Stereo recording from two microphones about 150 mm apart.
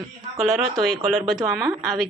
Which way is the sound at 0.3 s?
Centre (ahead or behind).